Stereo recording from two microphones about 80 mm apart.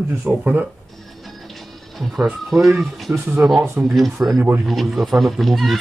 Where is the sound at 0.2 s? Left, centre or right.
Centre.